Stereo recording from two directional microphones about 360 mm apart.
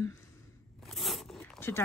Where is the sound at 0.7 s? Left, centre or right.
Centre.